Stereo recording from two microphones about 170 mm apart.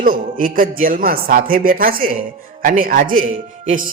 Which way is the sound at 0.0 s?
55° right (ahead or behind).